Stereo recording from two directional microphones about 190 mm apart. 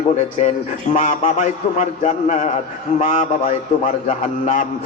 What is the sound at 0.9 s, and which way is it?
Mantra, 40° left (ahead or behind).